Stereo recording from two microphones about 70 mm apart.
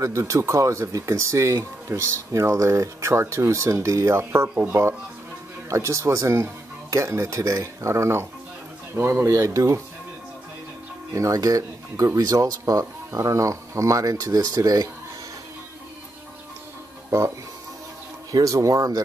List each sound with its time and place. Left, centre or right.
0.0 s speech: right
5.7 s speech: right
11.1 s speech: right
18.3 s speech: right